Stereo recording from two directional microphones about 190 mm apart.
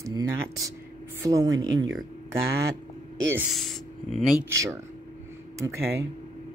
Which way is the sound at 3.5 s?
Centre (ahead or behind).